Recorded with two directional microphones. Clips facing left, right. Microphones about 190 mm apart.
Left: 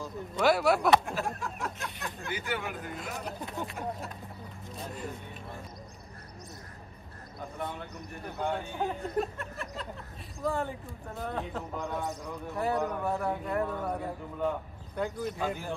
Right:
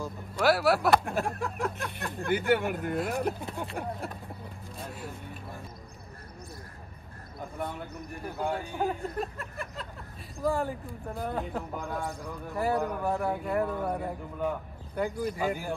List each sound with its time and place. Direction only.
0.4 s a man's voice: centre (ahead or behind)
1.0 s speech: 60° right (ahead or behind)
4.7 s speech: 5° right (ahead or behind)
7.3 s a man's voice: centre (ahead or behind)